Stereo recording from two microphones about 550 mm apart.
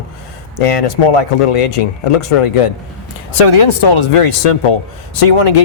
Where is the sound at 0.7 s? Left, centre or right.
Left.